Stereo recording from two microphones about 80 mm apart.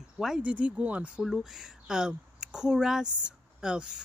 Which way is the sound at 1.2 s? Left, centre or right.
Centre.